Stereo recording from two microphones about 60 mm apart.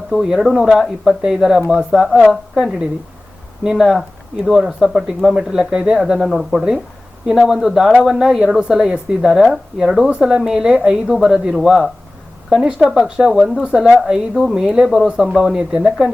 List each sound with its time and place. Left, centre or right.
0.1 s a woman's voice: centre
3.6 s a woman's voice: centre
15.5 s a woman's voice: centre